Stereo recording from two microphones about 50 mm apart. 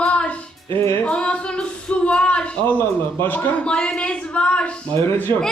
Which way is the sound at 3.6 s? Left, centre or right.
Centre.